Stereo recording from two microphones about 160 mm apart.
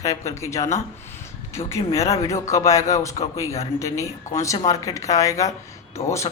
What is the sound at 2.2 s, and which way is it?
Speech, 20° left (ahead or behind).